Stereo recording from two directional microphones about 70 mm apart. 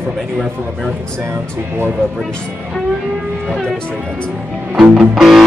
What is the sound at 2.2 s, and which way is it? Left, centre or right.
Speech, centre.